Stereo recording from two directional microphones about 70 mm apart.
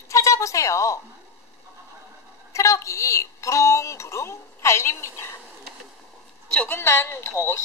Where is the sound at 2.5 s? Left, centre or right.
Left.